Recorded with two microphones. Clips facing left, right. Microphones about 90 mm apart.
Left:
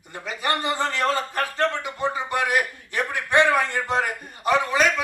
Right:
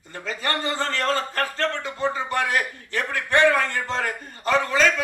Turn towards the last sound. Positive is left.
turn(degrees=15)  # may be behind; listen again after turning